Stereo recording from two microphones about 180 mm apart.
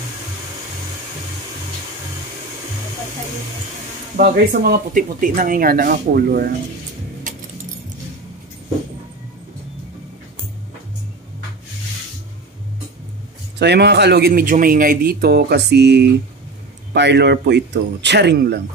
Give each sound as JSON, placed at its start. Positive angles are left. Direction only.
{"t": 4.2, "sound": "speech", "side_deg": -55}
{"t": 7.3, "sound": "keys jangling", "side_deg": -45}
{"t": 13.6, "sound": "a man's voice", "side_deg": -65}